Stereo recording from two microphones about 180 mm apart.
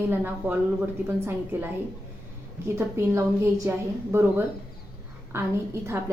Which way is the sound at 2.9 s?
15° right (ahead or behind).